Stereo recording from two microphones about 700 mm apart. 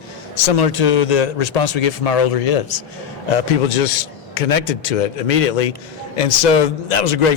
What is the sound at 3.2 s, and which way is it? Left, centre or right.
A man's voice, left.